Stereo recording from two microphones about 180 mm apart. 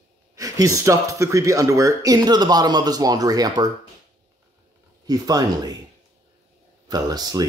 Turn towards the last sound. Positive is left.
turn(degrees=-20)  # may be behind; listen again after turning